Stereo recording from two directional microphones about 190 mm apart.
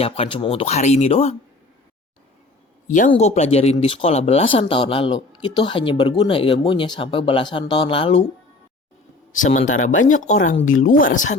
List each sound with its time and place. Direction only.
0.0 s speech: 30° left (ahead or behind)
2.8 s speech: 40° left (ahead or behind)
9.3 s speech: 40° left (ahead or behind)